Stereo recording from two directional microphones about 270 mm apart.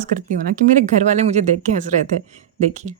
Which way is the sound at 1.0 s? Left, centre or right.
Right.